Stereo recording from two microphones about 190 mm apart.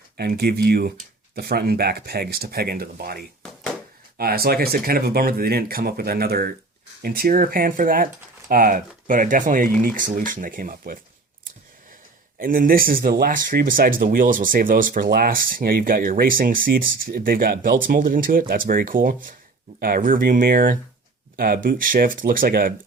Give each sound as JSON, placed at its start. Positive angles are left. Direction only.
{"t": 0.2, "sound": "speech", "side_deg": -55}
{"t": 4.2, "sound": "speech", "side_deg": -55}
{"t": 12.4, "sound": "speech", "side_deg": -50}